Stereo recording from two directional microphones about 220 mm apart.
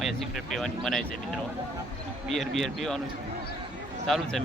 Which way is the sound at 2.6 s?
Centre (ahead or behind).